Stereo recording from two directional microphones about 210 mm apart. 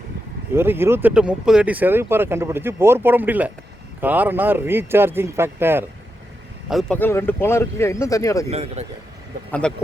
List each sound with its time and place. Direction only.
0.5 s speech: 10° right (ahead or behind)
6.7 s speech: centre (ahead or behind)
8.4 s a man's voice: 30° right (ahead or behind)
9.5 s speech: 5° left (ahead or behind)